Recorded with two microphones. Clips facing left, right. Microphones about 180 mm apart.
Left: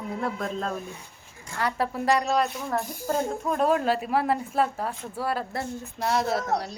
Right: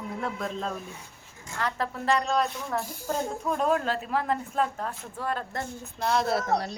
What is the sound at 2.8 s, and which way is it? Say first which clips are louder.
Speech: left 3 dB; 15° left (ahead or behind).